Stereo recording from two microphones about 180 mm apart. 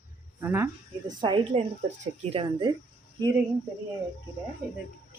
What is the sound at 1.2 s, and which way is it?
Speech, 25° right (ahead or behind).